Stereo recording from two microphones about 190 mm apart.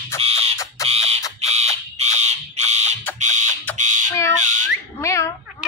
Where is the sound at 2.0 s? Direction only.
35° right (ahead or behind).